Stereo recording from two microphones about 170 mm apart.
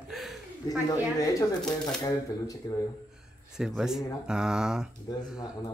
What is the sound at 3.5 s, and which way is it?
Speech, 5° right (ahead or behind).